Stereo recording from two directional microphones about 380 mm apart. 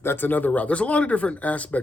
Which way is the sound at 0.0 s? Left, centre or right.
Centre.